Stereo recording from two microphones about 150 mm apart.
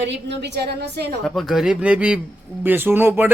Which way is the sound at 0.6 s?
90° right.